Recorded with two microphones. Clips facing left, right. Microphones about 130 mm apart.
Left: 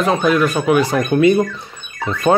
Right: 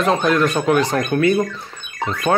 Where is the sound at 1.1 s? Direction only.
20° left (ahead or behind).